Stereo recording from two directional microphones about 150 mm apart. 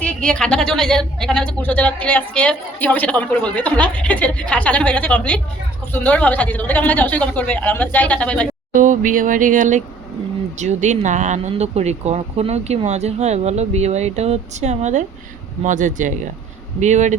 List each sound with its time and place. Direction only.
0.0 s speech: 5° left (ahead or behind)
8.7 s speech: 60° right (ahead or behind)